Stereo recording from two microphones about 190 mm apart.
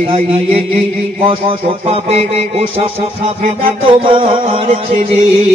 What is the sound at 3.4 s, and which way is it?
Music, 50° right (ahead or behind).